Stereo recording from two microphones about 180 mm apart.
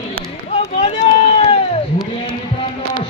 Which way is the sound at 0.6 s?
30° left (ahead or behind).